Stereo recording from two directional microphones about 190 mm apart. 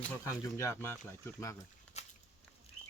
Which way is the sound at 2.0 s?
35° left (ahead or behind).